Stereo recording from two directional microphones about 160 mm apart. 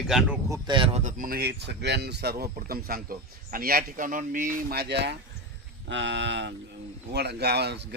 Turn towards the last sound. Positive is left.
turn(degrees=-90)